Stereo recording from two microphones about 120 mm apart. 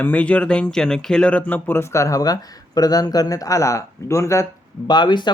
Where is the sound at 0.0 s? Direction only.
15° left (ahead or behind).